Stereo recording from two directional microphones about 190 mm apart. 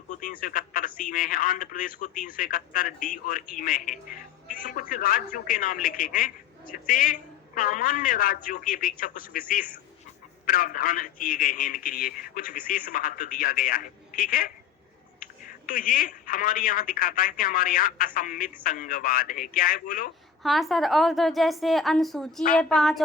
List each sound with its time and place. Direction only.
0.1 s speech: 40° left (ahead or behind)
20.4 s a woman's voice: centre (ahead or behind)